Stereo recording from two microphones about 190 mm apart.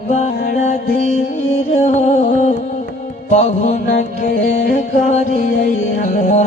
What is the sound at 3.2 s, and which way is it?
Music, 35° left (ahead or behind).